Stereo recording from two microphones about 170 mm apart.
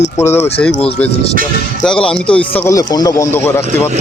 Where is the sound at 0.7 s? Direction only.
35° left (ahead or behind).